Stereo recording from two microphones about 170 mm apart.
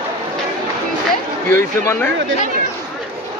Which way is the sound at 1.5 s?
15° left (ahead or behind).